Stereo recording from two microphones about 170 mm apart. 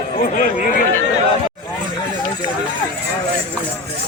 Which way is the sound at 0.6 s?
50° left (ahead or behind).